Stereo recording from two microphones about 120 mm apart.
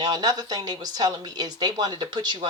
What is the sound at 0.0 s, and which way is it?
Speech, 35° right (ahead or behind).